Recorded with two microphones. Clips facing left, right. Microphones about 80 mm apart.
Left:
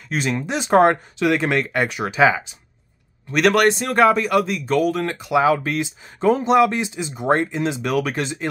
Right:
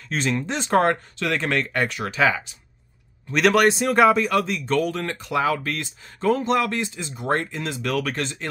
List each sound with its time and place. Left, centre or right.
0.1 s speech: centre
3.3 s speech: centre